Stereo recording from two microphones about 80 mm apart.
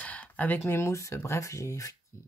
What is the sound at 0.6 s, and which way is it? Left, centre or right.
Speech, left.